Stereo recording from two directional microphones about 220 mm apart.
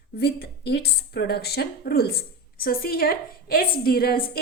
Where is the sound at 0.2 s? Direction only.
50° left (ahead or behind).